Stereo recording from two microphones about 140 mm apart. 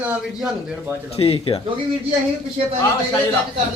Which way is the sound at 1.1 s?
45° left (ahead or behind).